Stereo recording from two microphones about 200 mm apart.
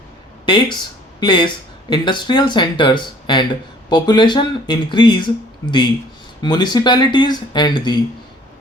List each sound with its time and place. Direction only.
0.4 s speech: 25° left (ahead or behind)
6.4 s speech: 20° left (ahead or behind)